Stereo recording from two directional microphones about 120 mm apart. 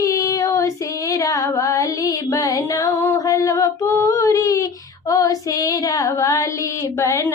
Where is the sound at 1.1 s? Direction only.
30° left (ahead or behind).